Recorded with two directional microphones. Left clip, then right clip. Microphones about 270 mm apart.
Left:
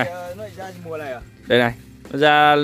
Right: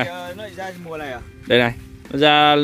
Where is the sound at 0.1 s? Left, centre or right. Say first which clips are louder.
Even; right.